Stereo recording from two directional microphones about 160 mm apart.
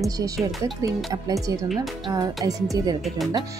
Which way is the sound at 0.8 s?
20° right (ahead or behind).